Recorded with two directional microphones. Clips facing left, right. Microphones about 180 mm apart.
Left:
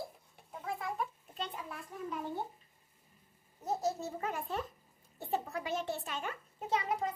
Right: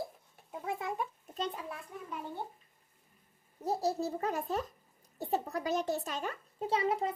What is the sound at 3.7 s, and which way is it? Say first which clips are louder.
Toothbrush: right 3 dB; 35° right (ahead or behind).